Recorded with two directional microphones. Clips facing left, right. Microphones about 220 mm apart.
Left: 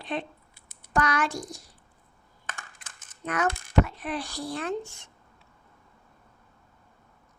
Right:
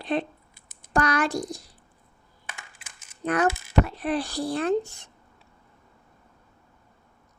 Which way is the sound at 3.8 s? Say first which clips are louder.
Right 6 dB; 35° right (ahead or behind).